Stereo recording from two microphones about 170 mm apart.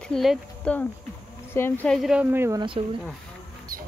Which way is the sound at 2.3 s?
15° right (ahead or behind).